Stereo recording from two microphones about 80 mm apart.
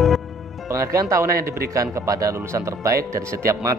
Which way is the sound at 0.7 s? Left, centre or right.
Right.